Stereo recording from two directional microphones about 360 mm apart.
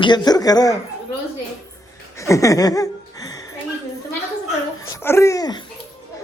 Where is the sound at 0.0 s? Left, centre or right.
Centre.